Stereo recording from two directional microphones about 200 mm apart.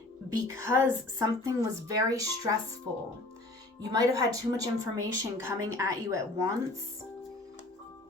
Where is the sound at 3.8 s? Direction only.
15° right (ahead or behind).